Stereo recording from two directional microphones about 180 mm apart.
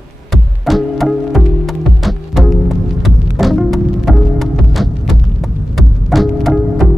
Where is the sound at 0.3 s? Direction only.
Centre (ahead or behind).